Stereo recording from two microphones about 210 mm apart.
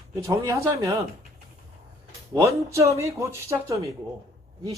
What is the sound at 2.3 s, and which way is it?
A man's voice, 15° right (ahead or behind).